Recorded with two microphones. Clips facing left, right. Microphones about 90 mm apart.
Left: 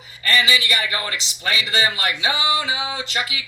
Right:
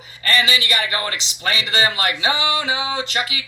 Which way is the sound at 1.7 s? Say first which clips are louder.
Right 3 dB; 40° right (ahead or behind).